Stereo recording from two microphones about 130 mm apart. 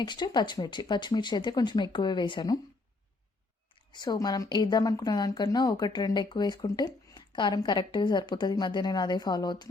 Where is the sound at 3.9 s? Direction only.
30° left (ahead or behind).